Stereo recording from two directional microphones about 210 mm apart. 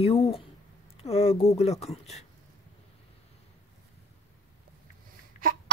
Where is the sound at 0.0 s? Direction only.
30° left (ahead or behind).